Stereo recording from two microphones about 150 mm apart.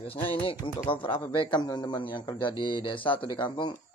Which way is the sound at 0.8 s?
35° left (ahead or behind).